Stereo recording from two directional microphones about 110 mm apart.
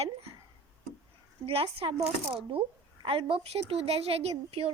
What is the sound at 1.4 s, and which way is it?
Speech, 55° right (ahead or behind).